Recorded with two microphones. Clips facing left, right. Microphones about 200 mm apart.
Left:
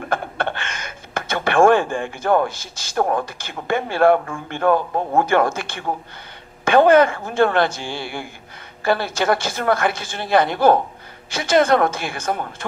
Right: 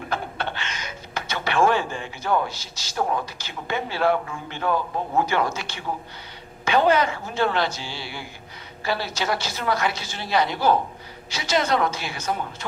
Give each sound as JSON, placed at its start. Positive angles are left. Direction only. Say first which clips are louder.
{"t": 0.1, "sound": "a woman's voice", "louder": "left 5 dB", "side_deg": 50}